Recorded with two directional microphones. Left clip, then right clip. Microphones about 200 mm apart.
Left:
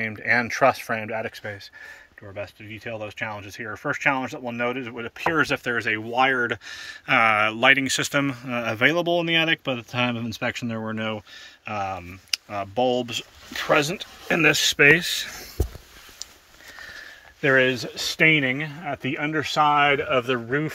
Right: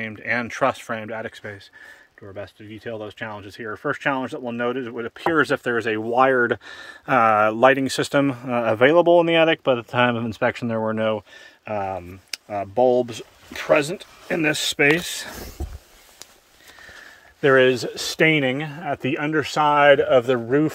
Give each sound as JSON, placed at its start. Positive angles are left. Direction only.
{"t": 0.0, "sound": "speech", "side_deg": -15}
{"t": 13.6, "sound": "speech", "side_deg": -10}
{"t": 16.8, "sound": "speech", "side_deg": -20}